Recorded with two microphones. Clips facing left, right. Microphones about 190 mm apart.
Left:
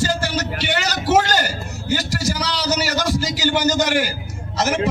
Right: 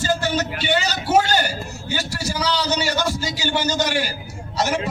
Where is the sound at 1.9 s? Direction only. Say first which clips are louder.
Left 2 dB; 40° left (ahead or behind).